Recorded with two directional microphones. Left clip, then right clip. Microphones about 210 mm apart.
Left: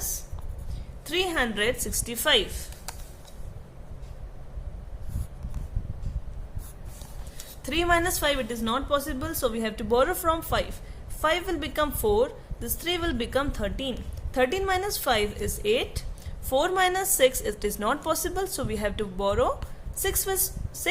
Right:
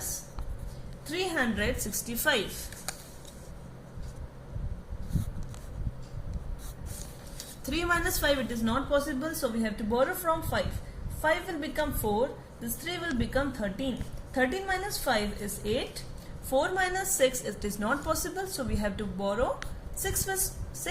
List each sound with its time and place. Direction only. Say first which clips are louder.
1.1 s a woman's voice: left 4 dB; 50° left (ahead or behind)
7.7 s a woman's voice: left 5 dB; 35° left (ahead or behind)